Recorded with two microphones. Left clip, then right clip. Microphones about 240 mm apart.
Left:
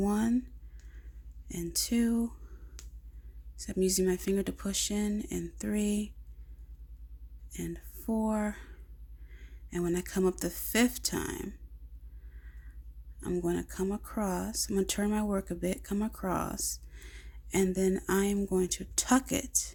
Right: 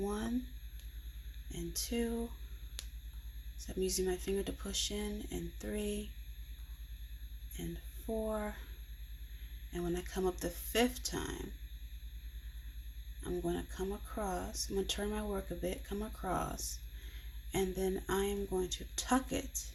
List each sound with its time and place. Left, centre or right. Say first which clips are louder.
0.0 s a sound: left 7 dB; left
1.5 s speech: left 7 dB; left
3.6 s speech: left 7 dB; left
8.3 s speech: left 5 dB; left
9.6 s speech: left 6 dB; left
13.2 s speech: left 6 dB; left